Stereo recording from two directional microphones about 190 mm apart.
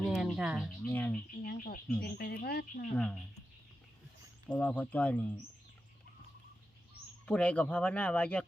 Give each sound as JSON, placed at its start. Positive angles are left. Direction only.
{"t": 0.0, "sound": "a sound", "side_deg": 0}
{"t": 0.9, "sound": "speech", "side_deg": 10}
{"t": 1.5, "sound": "speech", "side_deg": 50}
{"t": 2.9, "sound": "speech", "side_deg": 5}
{"t": 4.4, "sound": "speech", "side_deg": 5}
{"t": 7.3, "sound": "speech", "side_deg": 5}